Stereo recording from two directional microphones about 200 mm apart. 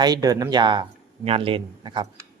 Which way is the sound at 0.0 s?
20° right (ahead or behind).